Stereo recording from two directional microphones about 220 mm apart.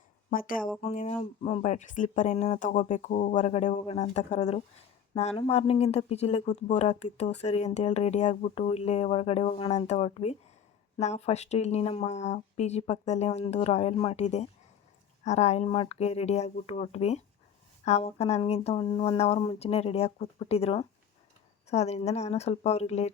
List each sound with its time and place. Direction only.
0.3 s speech: 40° left (ahead or behind)